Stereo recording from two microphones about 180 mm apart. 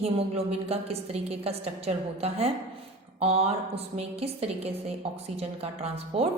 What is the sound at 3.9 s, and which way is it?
A woman's voice, 35° right (ahead or behind).